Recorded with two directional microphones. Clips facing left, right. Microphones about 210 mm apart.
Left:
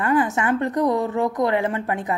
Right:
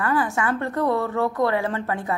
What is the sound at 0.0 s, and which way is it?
A woman's voice, 20° left (ahead or behind).